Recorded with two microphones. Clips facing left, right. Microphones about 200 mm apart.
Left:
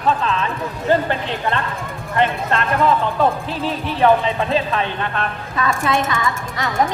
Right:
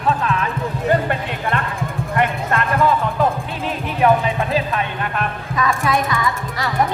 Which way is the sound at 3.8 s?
30° left (ahead or behind).